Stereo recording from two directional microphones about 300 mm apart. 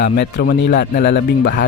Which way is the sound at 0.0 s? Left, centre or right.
Left.